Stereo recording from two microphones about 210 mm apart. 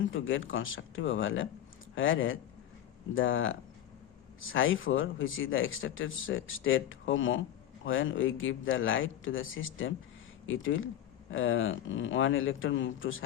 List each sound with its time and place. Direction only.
0.1 s speech: 70° left (ahead or behind)